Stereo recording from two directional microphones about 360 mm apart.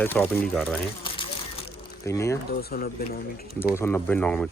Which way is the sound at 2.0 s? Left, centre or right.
Centre.